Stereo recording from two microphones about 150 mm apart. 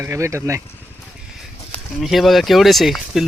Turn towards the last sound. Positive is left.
turn(degrees=0)  # may be behind; listen again after turning